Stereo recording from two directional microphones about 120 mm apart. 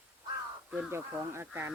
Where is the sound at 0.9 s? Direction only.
20° right (ahead or behind).